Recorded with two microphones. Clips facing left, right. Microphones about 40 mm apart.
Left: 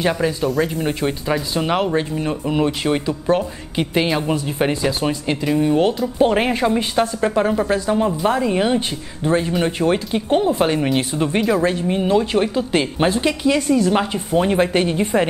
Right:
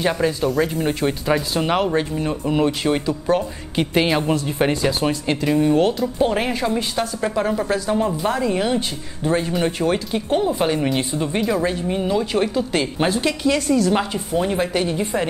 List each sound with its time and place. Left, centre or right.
0.0 s speech: centre
3.7 s speech: centre
6.1 s speech: left
9.3 s speech: centre
9.7 s speech: left
14.3 s speech: left